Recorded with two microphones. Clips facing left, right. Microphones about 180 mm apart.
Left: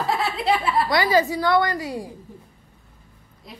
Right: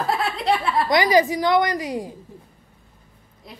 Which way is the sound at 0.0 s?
Centre (ahead or behind).